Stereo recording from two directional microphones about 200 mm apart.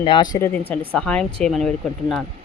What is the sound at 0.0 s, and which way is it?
Speech, 20° left (ahead or behind).